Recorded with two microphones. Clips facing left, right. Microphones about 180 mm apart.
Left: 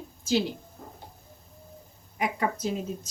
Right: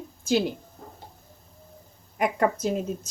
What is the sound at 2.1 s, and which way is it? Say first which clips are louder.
Speech: right 5 dB; 50° right (ahead or behind).